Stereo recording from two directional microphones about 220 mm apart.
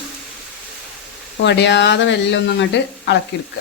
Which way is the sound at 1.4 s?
55° left (ahead or behind).